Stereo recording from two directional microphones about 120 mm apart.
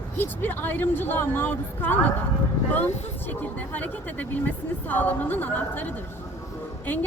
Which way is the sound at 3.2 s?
15° left (ahead or behind).